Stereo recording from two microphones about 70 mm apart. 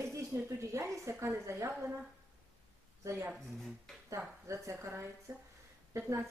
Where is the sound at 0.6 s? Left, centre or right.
Right.